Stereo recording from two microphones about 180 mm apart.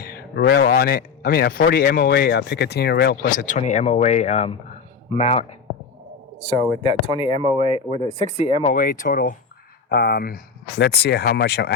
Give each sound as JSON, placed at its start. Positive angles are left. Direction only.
{"t": 0.0, "sound": "speech", "side_deg": 60}
{"t": 6.8, "sound": "speech", "side_deg": 30}
{"t": 7.3, "sound": "speech", "side_deg": -35}
{"t": 7.9, "sound": "speech", "side_deg": 35}
{"t": 9.9, "sound": "speech", "side_deg": 60}